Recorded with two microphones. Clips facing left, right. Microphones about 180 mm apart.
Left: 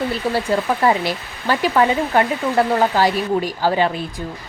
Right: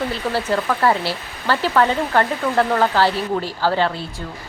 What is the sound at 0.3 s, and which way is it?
Speech, 15° left (ahead or behind).